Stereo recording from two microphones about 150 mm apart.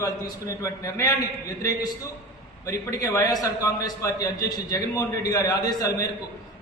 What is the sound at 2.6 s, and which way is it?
A man's voice, 20° left (ahead or behind).